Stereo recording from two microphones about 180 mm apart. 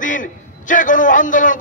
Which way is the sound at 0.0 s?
45° left (ahead or behind).